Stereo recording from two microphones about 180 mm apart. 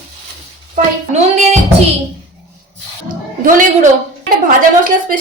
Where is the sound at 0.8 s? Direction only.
40° right (ahead or behind).